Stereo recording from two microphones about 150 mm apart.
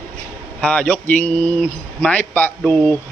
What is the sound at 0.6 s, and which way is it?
Speech, 10° left (ahead or behind).